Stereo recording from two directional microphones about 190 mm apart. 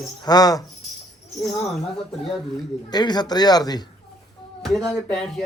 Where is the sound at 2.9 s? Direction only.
20° left (ahead or behind).